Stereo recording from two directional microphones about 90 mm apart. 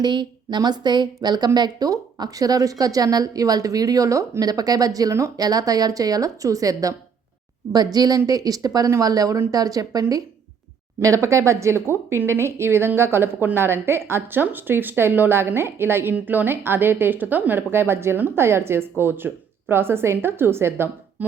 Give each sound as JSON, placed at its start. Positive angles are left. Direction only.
{"t": 0.0, "sound": "a woman's voice", "side_deg": -55}